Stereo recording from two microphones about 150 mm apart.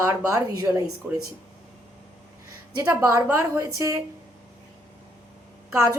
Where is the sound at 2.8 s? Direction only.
20° right (ahead or behind).